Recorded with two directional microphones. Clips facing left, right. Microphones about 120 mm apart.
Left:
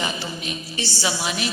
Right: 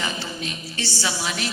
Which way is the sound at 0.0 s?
15° left (ahead or behind).